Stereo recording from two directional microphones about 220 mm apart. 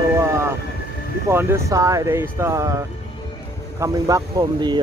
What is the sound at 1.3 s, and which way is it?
Speech, 10° right (ahead or behind).